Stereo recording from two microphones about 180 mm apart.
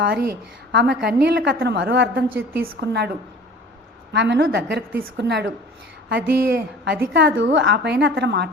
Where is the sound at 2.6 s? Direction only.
65° right (ahead or behind).